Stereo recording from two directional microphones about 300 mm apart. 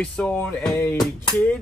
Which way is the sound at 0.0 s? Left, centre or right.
Centre.